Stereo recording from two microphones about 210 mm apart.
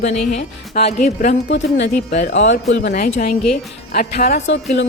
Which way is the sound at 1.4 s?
60° left (ahead or behind).